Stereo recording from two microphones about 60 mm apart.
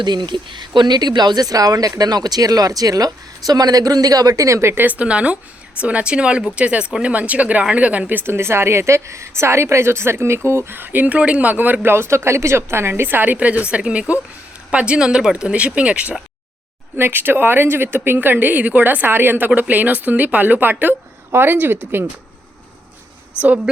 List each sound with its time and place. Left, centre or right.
0.9 s speech: right
4.7 s speech: right
8.2 s a woman's voice: right
17.0 s speech: right
23.7 s speech: centre